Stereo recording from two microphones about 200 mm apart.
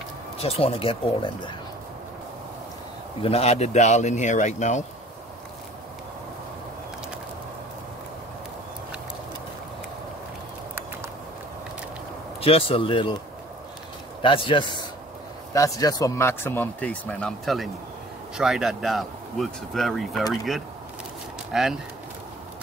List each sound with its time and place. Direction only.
0.4 s speech: 30° left (ahead or behind)
3.2 s speech: 30° left (ahead or behind)
12.4 s speech: 30° left (ahead or behind)
14.2 s speech: 25° left (ahead or behind); by 20.2 s centre (ahead or behind)
21.5 s speech: centre (ahead or behind)